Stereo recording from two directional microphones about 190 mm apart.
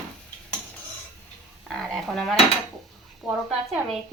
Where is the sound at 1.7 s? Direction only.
Centre (ahead or behind).